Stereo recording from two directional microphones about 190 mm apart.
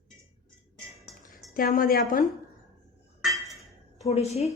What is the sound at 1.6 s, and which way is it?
Speech, 50° left (ahead or behind).